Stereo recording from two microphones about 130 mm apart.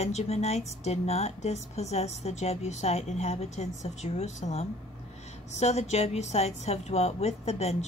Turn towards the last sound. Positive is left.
turn(degrees=60)  # may be behind; listen again after turning